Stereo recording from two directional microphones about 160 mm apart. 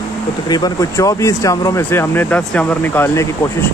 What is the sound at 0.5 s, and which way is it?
Speech, 20° left (ahead or behind).